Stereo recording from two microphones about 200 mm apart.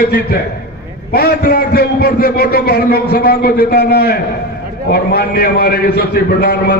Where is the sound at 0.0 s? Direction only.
50° left (ahead or behind).